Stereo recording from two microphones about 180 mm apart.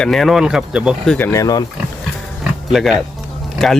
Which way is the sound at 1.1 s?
15° left (ahead or behind).